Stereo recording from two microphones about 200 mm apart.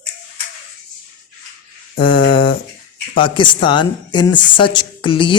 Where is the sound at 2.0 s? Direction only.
25° left (ahead or behind).